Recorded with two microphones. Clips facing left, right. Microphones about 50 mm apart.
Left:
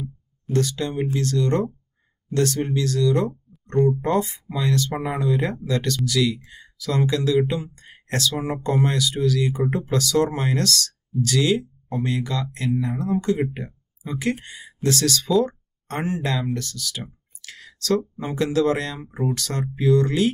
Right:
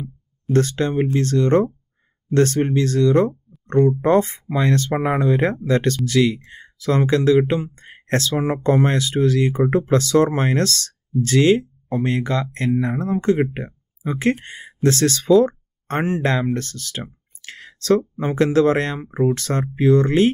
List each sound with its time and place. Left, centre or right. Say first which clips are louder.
0.5 s speech: right 5 dB; right